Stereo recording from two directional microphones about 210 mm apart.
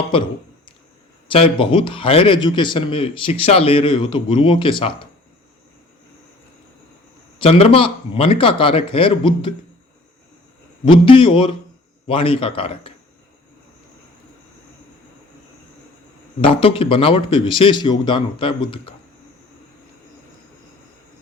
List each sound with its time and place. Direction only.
1.3 s a man's voice: 25° left (ahead or behind)
7.3 s a man's voice: 25° left (ahead or behind)
10.8 s a man's voice: 25° left (ahead or behind)
16.4 s a man's voice: 25° left (ahead or behind)